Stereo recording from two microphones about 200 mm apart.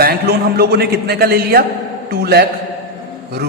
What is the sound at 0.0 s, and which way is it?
A woman's voice, 50° right (ahead or behind).